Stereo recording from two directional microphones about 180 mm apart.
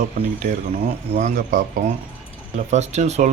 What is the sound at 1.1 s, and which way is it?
Speech, 40° right (ahead or behind).